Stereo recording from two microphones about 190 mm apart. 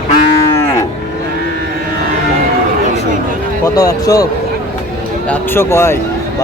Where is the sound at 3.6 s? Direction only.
20° left (ahead or behind).